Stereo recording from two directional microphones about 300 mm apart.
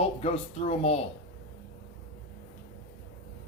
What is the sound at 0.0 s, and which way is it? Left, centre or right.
Speech, left.